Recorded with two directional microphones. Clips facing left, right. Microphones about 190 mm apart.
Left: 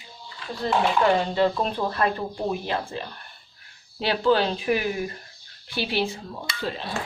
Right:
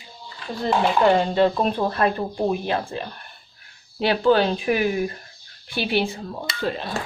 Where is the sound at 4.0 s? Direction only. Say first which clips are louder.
Right 3 dB; 55° right (ahead or behind).